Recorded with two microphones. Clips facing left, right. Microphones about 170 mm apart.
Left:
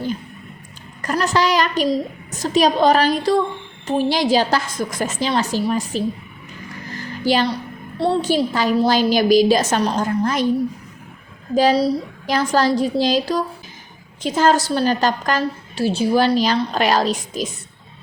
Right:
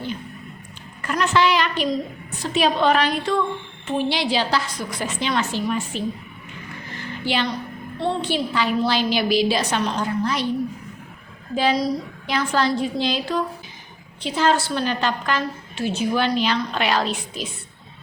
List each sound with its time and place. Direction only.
1.0 s a woman's voice: 40° left (ahead or behind)
6.9 s a sound: 40° left (ahead or behind)
7.9 s a woman's voice: 40° left (ahead or behind)
11.5 s a woman's voice: 35° left (ahead or behind)